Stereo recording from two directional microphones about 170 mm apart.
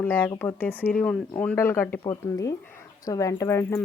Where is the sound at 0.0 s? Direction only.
10° left (ahead or behind).